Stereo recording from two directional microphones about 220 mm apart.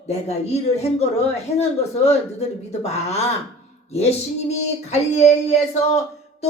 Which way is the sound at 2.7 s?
30° left (ahead or behind).